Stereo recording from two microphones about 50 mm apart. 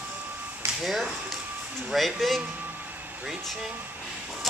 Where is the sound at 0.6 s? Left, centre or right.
Right.